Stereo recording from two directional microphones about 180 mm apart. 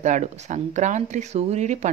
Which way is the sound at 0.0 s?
40° right (ahead or behind).